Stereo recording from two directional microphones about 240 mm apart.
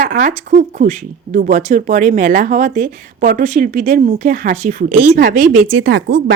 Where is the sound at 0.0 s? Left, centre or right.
Right.